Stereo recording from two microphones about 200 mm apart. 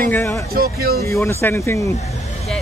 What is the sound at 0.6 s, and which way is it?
Speech, 50° right (ahead or behind).